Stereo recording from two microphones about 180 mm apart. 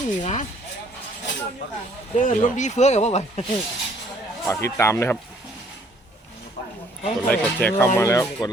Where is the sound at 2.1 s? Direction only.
45° left (ahead or behind).